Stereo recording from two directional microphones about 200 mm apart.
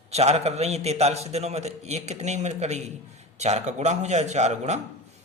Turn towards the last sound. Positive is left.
turn(degrees=-35)  # may be behind; listen again after turning